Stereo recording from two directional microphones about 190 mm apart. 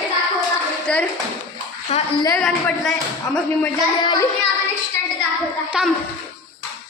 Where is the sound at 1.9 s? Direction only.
35° left (ahead or behind).